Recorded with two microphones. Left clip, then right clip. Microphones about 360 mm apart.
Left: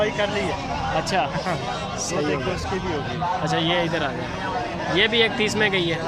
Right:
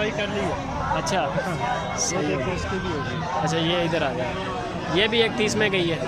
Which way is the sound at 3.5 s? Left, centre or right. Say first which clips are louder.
Left 1 dB; centre.